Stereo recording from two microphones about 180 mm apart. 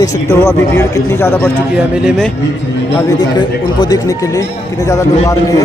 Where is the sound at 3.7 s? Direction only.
20° left (ahead or behind).